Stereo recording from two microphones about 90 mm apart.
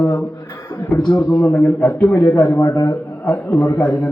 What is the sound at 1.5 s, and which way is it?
A man's voice, 25° left (ahead or behind).